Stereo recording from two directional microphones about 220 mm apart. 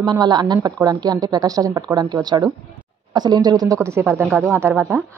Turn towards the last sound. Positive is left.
turn(degrees=-5)  # may be behind; listen again after turning